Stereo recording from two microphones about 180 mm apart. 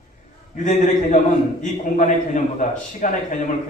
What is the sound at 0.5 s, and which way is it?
A man's voice, 45° left (ahead or behind).